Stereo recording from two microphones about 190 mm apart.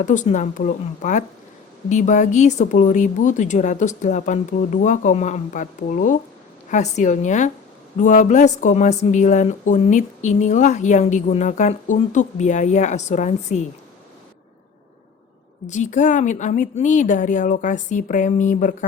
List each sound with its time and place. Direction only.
0.0 s speech: 40° left (ahead or behind)
15.6 s speech: 40° left (ahead or behind)